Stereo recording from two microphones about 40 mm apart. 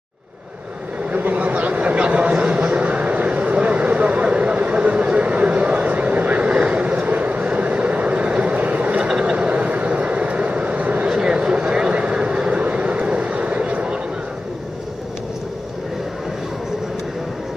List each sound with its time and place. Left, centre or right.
1.1 s a sound: right
5.0 s vehicle: right
11.1 s vehicle: right